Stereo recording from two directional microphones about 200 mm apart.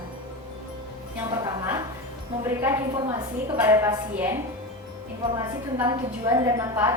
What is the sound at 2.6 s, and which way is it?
A woman's voice, 15° right (ahead or behind).